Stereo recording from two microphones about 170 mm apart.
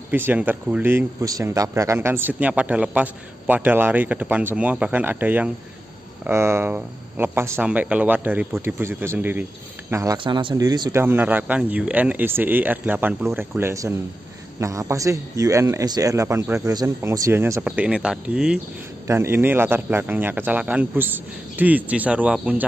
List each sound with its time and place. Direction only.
0.1 s speech: 10° right (ahead or behind)
10.1 s speech: 30° right (ahead or behind); by 22.7 s 5° right (ahead or behind)